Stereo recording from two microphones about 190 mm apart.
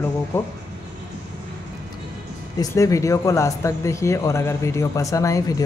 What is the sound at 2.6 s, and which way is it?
Speech, 15° left (ahead or behind).